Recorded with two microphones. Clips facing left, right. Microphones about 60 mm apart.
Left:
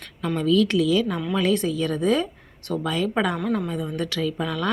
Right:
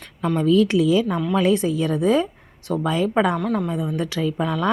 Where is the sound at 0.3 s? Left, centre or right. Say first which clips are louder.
Right 3 dB; right.